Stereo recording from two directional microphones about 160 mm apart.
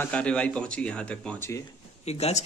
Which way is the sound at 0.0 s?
5° left (ahead or behind).